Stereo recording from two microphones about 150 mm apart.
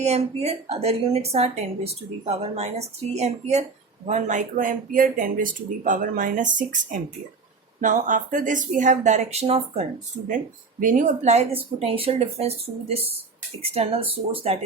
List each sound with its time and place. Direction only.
0.0 s a woman's voice: 45° right (ahead or behind)
10.2 s a woman's voice: 60° right (ahead or behind); by 14.6 s 40° right (ahead or behind)